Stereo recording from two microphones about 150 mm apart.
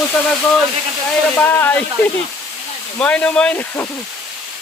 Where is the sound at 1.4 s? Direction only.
15° left (ahead or behind).